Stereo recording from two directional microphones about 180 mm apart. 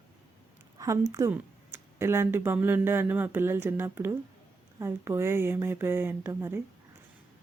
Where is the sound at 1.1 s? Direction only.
15° right (ahead or behind).